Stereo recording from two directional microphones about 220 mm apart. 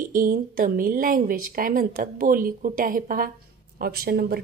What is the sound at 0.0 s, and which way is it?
A woman's voice, 40° right (ahead or behind).